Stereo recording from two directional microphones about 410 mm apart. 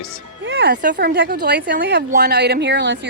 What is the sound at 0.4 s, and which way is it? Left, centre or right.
Speech, right.